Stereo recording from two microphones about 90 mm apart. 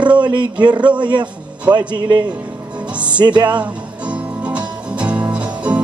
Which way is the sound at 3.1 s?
55° right (ahead or behind).